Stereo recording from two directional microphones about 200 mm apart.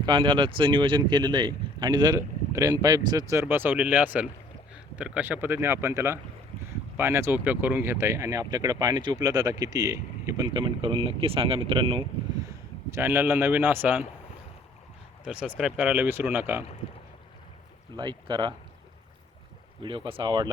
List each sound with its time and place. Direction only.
0.0 s speech: 25° right (ahead or behind)
15.2 s speech: 5° right (ahead or behind)
17.9 s speech: 20° right (ahead or behind)
19.8 s speech: 25° right (ahead or behind)